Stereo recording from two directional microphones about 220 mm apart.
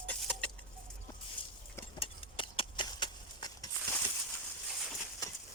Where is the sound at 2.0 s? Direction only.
25° left (ahead or behind).